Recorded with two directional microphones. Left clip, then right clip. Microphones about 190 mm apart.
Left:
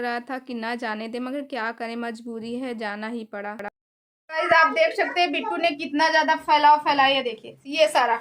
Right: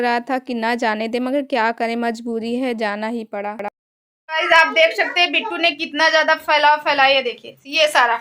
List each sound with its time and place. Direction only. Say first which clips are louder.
0.0 s a woman's voice: right 9 dB; 35° right (ahead or behind); by 8.1 s 5° right (ahead or behind)